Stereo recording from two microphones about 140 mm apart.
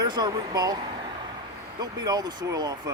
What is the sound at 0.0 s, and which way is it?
Speech, 30° right (ahead or behind).